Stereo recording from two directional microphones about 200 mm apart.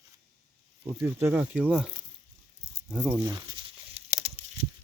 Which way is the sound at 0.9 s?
10° right (ahead or behind).